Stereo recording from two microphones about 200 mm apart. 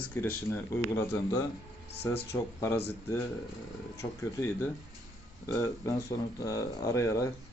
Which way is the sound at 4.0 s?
10° left (ahead or behind).